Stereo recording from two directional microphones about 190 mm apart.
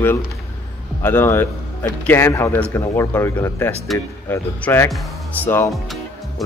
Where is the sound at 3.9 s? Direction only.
Centre (ahead or behind).